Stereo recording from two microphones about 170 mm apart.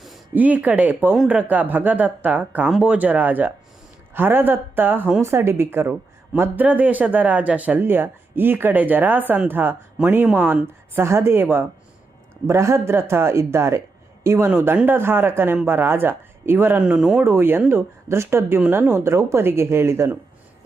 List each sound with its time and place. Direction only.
0.0 s speech: 5° right (ahead or behind)